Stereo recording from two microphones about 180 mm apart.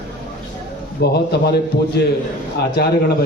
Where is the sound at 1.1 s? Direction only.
65° left (ahead or behind).